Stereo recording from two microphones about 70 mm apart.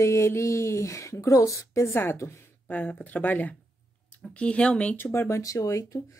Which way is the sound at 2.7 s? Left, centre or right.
Left.